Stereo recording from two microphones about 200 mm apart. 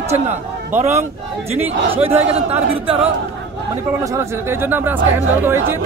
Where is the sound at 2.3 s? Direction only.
30° right (ahead or behind).